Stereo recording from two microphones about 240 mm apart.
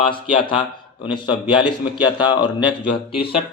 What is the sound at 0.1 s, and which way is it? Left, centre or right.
A man's voice, left.